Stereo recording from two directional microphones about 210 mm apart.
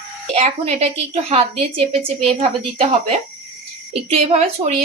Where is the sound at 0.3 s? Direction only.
30° right (ahead or behind).